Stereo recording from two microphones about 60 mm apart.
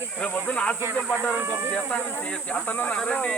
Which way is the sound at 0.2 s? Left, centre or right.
Left.